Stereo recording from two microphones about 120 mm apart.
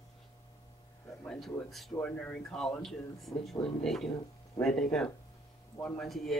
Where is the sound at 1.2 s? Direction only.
5° left (ahead or behind).